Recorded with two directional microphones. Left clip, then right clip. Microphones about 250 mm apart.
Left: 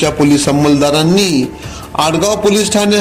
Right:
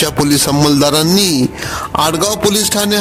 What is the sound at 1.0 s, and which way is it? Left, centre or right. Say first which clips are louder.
Speech: left 1 dB; right.